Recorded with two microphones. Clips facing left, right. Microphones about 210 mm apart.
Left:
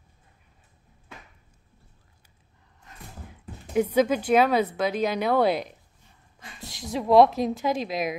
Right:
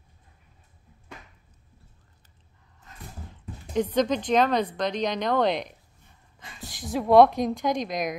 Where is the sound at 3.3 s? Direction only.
10° left (ahead or behind).